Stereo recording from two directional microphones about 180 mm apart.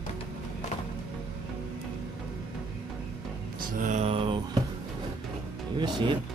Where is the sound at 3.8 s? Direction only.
40° right (ahead or behind).